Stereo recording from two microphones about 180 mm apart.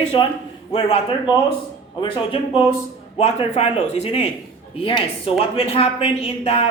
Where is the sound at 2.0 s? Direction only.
30° left (ahead or behind).